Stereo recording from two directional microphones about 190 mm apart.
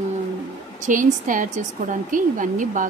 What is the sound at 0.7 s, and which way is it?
A woman's voice, 40° right (ahead or behind).